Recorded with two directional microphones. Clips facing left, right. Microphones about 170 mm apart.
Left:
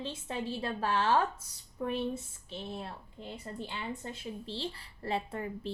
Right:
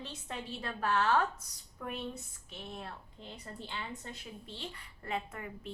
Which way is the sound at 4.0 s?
30° left (ahead or behind).